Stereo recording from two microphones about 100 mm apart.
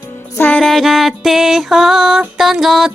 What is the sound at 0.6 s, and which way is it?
Music, centre (ahead or behind).